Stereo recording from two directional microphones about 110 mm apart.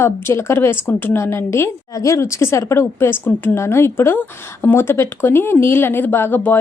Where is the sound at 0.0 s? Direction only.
25° left (ahead or behind).